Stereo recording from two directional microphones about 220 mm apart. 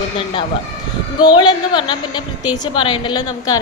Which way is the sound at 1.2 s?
20° left (ahead or behind).